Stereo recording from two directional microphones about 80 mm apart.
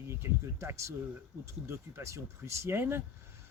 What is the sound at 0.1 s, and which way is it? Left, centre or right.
Speech, right.